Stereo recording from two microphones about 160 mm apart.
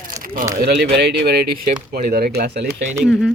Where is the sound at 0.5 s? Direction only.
90° right.